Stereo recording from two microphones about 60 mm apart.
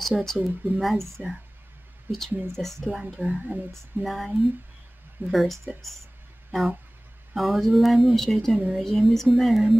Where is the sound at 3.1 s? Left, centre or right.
Right.